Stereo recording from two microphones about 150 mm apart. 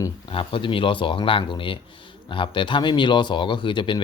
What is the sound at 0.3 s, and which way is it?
Speech, 35° left (ahead or behind).